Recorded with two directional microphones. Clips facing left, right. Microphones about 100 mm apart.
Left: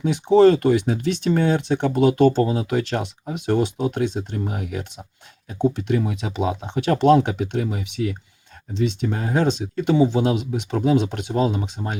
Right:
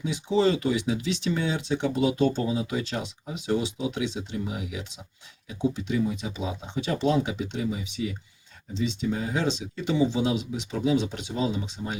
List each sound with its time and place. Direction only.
0.0 s speech: 60° left (ahead or behind)